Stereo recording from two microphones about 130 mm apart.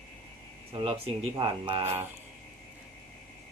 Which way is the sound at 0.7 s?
45° right (ahead or behind).